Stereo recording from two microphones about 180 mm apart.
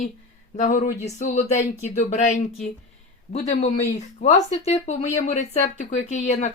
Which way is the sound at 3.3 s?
40° left (ahead or behind).